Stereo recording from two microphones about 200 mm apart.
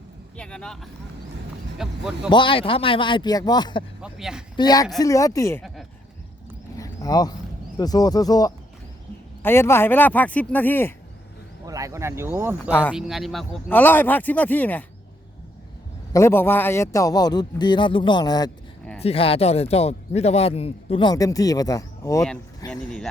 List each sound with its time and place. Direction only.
0.3 s speech: 5° left (ahead or behind)
2.3 s speech: 25° left (ahead or behind)
4.0 s speech: 5° right (ahead or behind)
4.5 s speech: 20° left (ahead or behind)
6.7 s a sound: 15° left (ahead or behind)
7.8 s speech: 20° left (ahead or behind)
11.6 s speech: 15° right (ahead or behind); by 14.8 s 10° left (ahead or behind)
16.1 s speech: 10° left (ahead or behind)
22.7 s speech: 5° left (ahead or behind)